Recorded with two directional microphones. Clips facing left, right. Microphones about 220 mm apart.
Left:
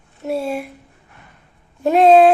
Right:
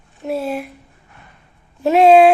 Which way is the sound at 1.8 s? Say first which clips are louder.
Right 1 dB; 10° right (ahead or behind).